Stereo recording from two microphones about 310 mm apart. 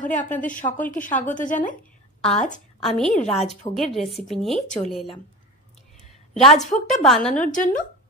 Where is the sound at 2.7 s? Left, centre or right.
Centre.